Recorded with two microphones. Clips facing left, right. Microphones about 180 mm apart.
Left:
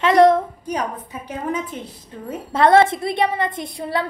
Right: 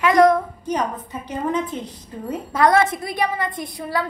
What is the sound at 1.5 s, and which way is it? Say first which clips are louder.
Speech: right 2 dB; 10° left (ahead or behind).